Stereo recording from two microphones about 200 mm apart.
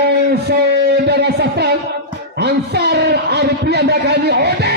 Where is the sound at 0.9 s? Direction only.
55° right (ahead or behind).